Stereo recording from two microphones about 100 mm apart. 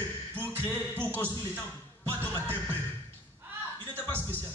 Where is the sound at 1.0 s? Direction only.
15° left (ahead or behind).